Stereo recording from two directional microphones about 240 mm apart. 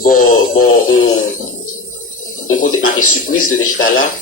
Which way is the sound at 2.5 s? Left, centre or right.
Left.